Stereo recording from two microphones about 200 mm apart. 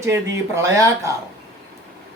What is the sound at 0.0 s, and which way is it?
Speech, 15° right (ahead or behind).